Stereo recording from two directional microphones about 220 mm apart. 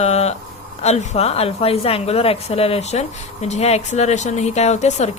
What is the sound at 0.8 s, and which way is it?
A woman's voice, 30° left (ahead or behind).